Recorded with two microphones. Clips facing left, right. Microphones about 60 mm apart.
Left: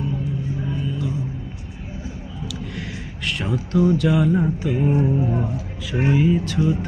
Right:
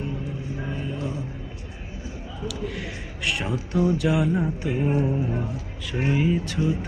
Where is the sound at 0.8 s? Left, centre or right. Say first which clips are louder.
Left 4 dB; right.